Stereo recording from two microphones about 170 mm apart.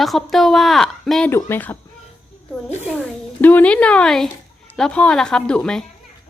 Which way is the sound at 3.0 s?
10° left (ahead or behind).